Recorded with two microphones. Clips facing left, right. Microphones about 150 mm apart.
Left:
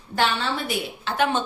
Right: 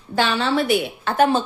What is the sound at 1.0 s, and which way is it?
Speech, 45° right (ahead or behind).